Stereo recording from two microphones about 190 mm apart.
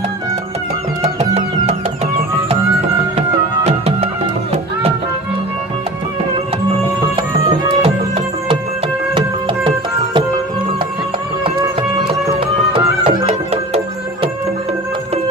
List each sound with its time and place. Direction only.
1.0 s music: 35° right (ahead or behind)
3.2 s music: 35° right (ahead or behind)
12.7 s music: 30° right (ahead or behind)